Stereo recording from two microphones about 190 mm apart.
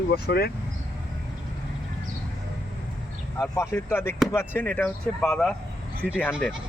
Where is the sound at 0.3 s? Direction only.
55° left (ahead or behind).